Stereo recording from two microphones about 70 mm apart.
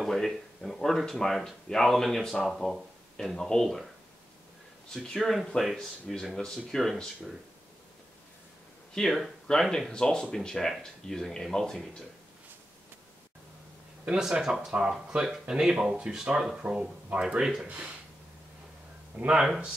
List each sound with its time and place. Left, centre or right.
0.0 s speech: centre
4.9 s speech: centre
8.9 s speech: centre
14.0 s speech: centre
19.1 s speech: centre